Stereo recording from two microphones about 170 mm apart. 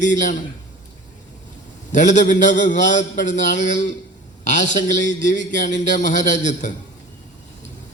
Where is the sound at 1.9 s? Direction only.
45° left (ahead or behind).